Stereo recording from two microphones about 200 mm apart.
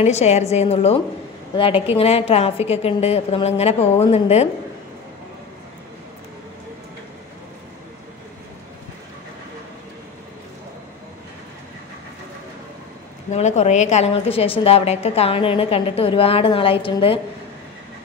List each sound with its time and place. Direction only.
0.0 s a woman's voice: 35° left (ahead or behind)
13.3 s a woman's voice: 35° left (ahead or behind)